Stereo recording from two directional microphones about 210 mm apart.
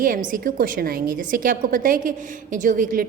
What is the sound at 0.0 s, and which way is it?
A woman's voice, 40° right (ahead or behind).